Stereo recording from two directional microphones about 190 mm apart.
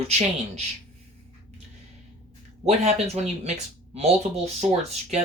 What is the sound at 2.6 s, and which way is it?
Speech, 35° right (ahead or behind).